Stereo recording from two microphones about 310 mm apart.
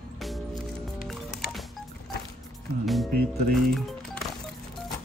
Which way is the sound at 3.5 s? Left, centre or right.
Centre.